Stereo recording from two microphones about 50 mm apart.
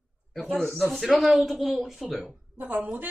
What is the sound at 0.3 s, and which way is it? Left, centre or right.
Speech, centre.